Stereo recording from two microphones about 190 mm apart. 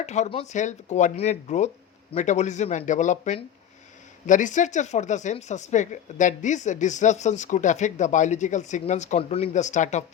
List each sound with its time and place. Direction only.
0.0 s speech: 35° left (ahead or behind)